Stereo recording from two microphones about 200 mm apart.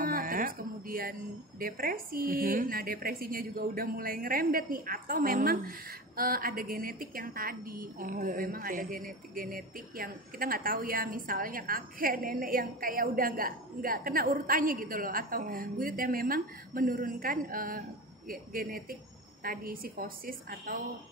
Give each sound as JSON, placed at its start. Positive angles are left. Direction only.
{"t": 0.0, "sound": "music", "side_deg": -45}
{"t": 1.6, "sound": "a woman's voice", "side_deg": -45}